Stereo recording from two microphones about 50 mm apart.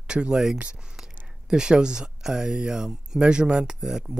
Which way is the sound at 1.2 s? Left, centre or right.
Centre.